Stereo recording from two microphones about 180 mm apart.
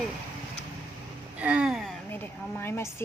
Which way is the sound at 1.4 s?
5° right (ahead or behind).